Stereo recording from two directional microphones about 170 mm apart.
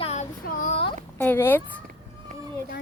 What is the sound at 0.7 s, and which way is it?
Speech, 35° left (ahead or behind).